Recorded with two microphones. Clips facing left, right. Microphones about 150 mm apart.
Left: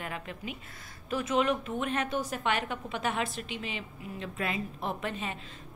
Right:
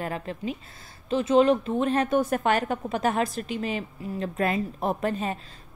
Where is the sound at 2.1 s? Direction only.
50° right (ahead or behind).